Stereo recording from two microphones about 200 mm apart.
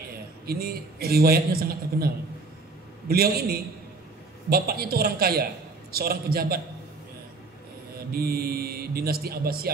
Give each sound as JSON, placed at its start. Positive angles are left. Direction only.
{"t": 0.5, "sound": "speech", "side_deg": -50}
{"t": 3.1, "sound": "speech", "side_deg": -50}
{"t": 8.1, "sound": "speech", "side_deg": -50}